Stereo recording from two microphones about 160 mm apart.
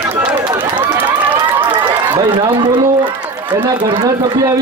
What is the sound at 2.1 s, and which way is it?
A man's voice, 30° right (ahead or behind).